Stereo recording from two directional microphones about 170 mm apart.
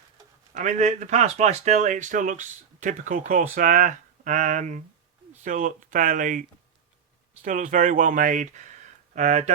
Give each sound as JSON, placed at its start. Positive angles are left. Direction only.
{"t": 0.5, "sound": "speech", "side_deg": -45}
{"t": 7.4, "sound": "speech", "side_deg": -50}